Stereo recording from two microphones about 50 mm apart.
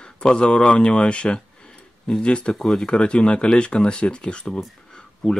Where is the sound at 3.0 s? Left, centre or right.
Left.